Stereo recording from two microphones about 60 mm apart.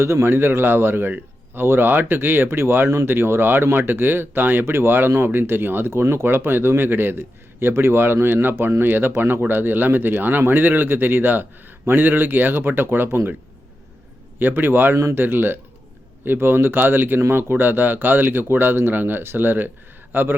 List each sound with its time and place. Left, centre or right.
0.0 s speech: right
14.3 s speech: right